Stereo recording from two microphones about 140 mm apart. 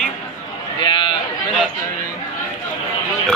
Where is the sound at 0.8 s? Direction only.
35° left (ahead or behind).